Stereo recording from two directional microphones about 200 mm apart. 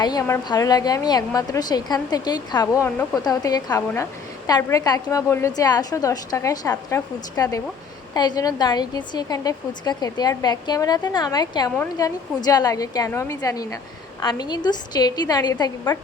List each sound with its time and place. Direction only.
0.0 s a woman's voice: 20° left (ahead or behind)